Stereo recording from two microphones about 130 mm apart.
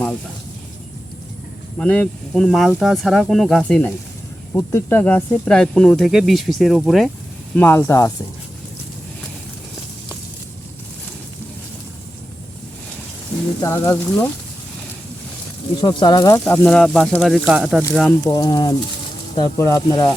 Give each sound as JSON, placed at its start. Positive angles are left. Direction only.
{"t": 1.8, "sound": "speech", "side_deg": 10}
{"t": 7.5, "sound": "speech", "side_deg": 15}
{"t": 13.6, "sound": "speech", "side_deg": 25}
{"t": 15.8, "sound": "speech", "side_deg": 35}
{"t": 16.5, "sound": "speech", "side_deg": 15}
{"t": 18.3, "sound": "speech", "side_deg": 25}